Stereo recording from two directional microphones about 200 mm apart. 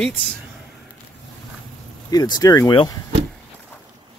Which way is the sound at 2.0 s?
20° left (ahead or behind).